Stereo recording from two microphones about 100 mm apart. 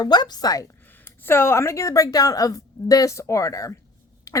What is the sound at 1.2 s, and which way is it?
A woman's voice, 25° left (ahead or behind).